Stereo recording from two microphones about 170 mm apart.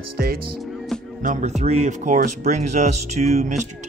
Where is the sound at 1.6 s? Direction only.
45° right (ahead or behind).